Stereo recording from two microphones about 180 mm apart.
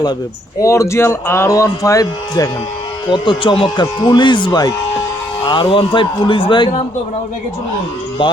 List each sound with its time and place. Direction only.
0.6 s speech: 15° left (ahead or behind)
8.2 s speech: 30° left (ahead or behind)